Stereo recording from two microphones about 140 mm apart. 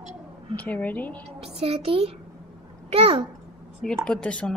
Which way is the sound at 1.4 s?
45° right (ahead or behind).